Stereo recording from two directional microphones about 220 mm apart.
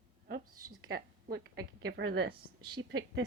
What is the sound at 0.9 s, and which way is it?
A woman's voice, 45° right (ahead or behind).